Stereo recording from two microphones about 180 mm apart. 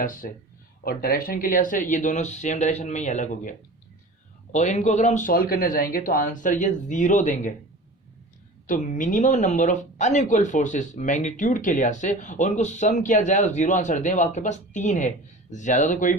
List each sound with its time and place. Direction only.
0.0 s speech: 50° left (ahead or behind)
4.5 s speech: 40° left (ahead or behind)
8.6 s speech: 45° left (ahead or behind)